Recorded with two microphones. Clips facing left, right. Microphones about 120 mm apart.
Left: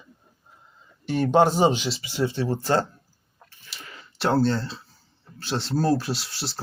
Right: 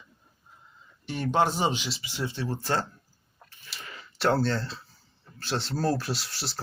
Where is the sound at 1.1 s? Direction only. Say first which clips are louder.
Left 6 dB; 35° left (ahead or behind).